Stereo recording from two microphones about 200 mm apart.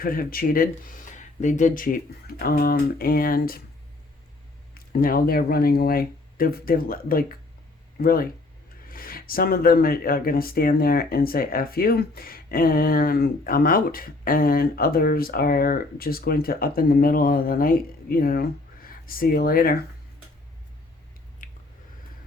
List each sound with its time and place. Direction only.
0.0 s speech: 45° left (ahead or behind)
4.7 s speech: 45° left (ahead or behind)
21.4 s squish: 40° left (ahead or behind)